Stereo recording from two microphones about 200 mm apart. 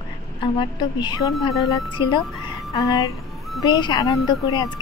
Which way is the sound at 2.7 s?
15° left (ahead or behind).